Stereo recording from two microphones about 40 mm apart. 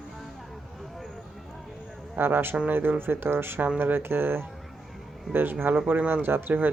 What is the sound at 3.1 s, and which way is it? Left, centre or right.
Speech, right.